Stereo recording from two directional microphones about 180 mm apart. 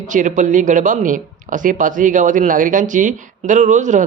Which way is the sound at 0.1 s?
45° right (ahead or behind).